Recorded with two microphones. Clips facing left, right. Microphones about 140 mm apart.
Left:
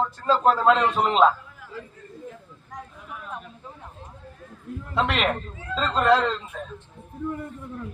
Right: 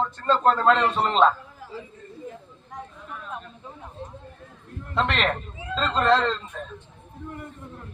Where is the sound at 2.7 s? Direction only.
5° left (ahead or behind).